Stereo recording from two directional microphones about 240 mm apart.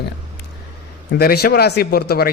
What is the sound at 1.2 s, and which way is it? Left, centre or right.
Speech, left.